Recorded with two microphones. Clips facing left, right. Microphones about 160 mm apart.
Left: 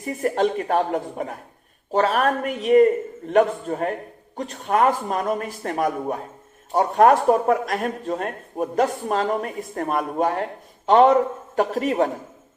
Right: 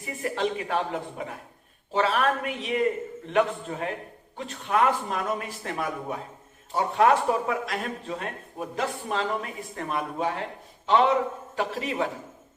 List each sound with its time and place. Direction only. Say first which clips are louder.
0.0 s speech: left 7 dB; 45° left (ahead or behind)